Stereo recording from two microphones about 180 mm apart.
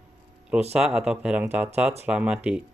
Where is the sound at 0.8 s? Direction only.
5° right (ahead or behind).